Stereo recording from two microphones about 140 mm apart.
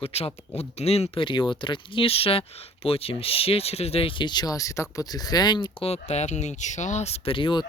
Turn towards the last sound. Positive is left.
turn(degrees=35)  # may be behind; listen again after turning